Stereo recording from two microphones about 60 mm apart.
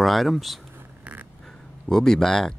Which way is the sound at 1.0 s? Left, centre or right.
Right.